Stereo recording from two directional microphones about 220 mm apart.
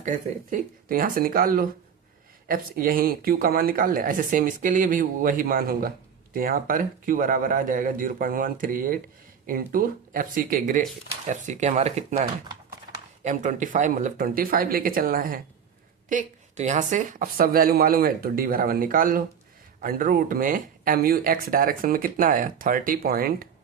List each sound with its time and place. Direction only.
0.5 s speech: 40° right (ahead or behind)